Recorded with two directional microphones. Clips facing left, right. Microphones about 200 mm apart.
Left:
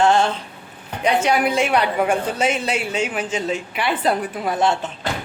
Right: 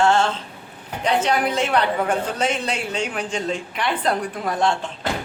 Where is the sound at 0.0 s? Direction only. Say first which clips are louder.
Left 1 dB; 15° left (ahead or behind).